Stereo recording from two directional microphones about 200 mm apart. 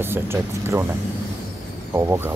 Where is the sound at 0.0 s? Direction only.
10° right (ahead or behind).